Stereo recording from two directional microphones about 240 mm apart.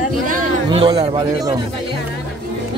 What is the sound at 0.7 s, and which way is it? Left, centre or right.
Speech, right.